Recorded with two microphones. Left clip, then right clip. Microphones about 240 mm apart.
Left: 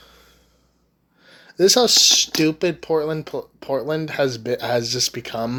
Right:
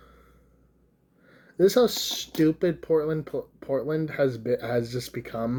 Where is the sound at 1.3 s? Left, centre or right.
Centre.